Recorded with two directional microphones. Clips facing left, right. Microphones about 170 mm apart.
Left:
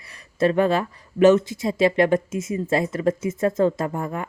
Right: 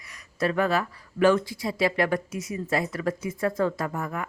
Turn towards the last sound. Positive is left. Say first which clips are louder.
# left 4 dB
turn(degrees=25)  # may be behind; listen again after turning